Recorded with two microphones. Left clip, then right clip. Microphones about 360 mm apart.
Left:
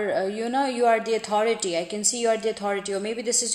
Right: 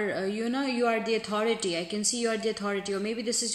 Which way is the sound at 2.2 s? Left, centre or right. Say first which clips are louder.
Left 7 dB; centre.